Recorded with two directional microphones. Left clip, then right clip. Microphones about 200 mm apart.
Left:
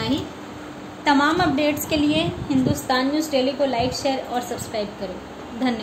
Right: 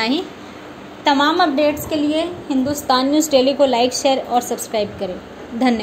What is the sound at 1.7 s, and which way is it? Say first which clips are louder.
Speech: right 2 dB; 5° right (ahead or behind).